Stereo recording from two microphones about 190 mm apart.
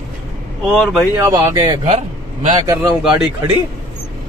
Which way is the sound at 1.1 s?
15° right (ahead or behind).